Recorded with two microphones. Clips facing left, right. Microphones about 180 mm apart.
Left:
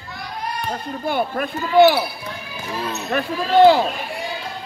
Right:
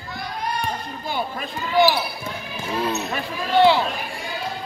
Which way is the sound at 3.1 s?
55° left (ahead or behind).